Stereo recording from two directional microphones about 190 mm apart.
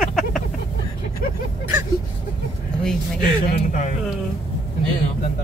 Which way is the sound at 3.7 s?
40° left (ahead or behind).